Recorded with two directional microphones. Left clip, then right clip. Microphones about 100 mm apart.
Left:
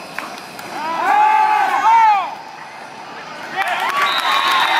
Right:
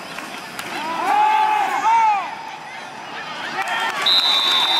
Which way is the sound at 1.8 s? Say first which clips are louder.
Left 5 dB; 15° left (ahead or behind).